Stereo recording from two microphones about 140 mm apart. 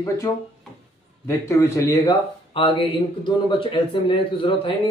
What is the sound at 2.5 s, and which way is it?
A man's voice, 40° left (ahead or behind).